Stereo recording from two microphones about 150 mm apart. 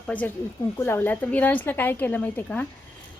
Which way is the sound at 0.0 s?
10° left (ahead or behind).